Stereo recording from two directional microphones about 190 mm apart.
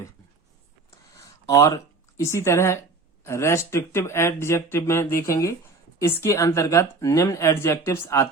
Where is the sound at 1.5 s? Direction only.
15° left (ahead or behind).